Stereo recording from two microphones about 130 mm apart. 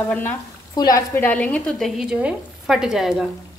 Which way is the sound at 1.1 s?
10° left (ahead or behind).